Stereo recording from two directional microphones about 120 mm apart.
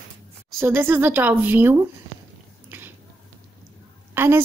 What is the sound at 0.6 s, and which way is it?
Speech, 20° right (ahead or behind).